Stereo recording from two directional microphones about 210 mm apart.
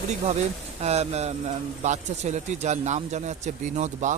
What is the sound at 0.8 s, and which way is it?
Speech, 30° right (ahead or behind).